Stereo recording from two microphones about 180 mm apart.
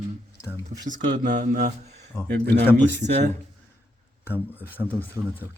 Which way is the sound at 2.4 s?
10° left (ahead or behind).